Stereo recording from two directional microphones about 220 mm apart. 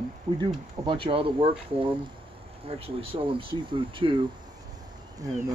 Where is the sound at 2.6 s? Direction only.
25° right (ahead or behind).